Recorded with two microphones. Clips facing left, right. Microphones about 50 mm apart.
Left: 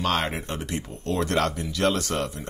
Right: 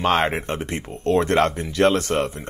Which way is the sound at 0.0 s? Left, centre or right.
Right.